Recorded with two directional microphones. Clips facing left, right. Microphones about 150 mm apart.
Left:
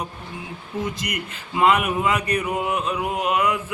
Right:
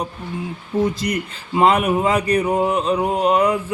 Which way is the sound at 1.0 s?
35° right (ahead or behind).